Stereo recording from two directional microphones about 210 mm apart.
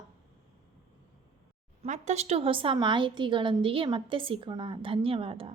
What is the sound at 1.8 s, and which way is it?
A woman's voice, 30° right (ahead or behind).